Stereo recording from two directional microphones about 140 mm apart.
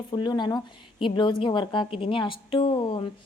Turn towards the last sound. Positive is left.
turn(degrees=35)  # may be behind; listen again after turning